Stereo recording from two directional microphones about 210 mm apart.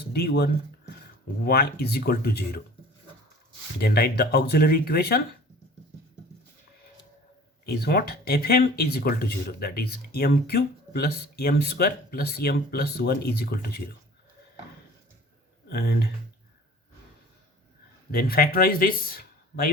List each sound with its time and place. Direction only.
0.1 s speech: 50° left (ahead or behind)
3.8 s speech: 50° left (ahead or behind)
7.6 s speech: 50° left (ahead or behind)
15.7 s speech: 50° left (ahead or behind)
18.1 s speech: 45° left (ahead or behind)